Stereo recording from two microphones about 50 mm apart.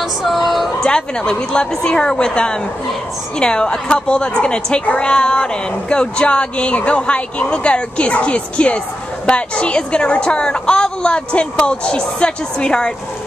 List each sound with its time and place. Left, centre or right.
0.2 s speech: centre
0.8 s a woman's voice: centre